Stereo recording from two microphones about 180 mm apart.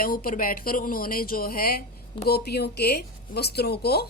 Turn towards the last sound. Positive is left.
turn(degrees=60)  # may be behind; listen again after turning